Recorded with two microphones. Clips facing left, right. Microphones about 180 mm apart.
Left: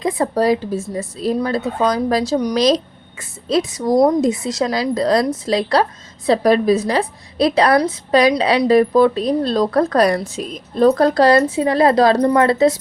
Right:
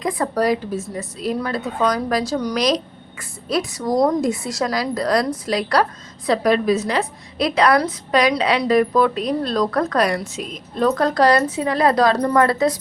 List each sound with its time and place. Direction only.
0.0 s a woman's voice: 25° left (ahead or behind)